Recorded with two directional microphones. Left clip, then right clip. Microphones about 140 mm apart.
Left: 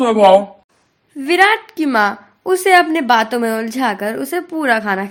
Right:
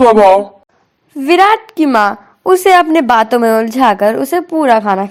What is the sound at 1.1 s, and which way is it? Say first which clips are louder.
A woman's voice: right 4 dB; 30° right (ahead or behind).